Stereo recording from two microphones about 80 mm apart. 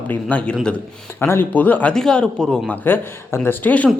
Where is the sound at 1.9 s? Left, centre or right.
Centre.